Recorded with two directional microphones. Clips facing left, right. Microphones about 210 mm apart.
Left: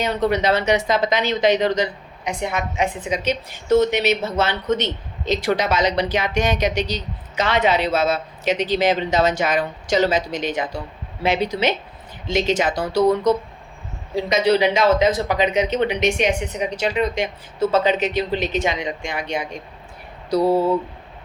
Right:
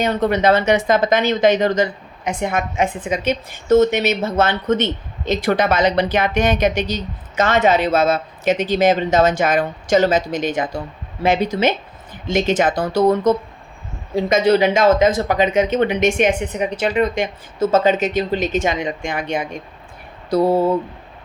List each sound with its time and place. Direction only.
0.0 s speech: 50° right (ahead or behind)